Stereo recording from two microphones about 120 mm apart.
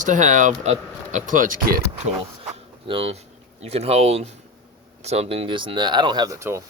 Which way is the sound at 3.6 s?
60° right (ahead or behind).